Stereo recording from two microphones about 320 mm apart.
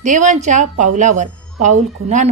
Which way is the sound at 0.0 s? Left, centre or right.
Right.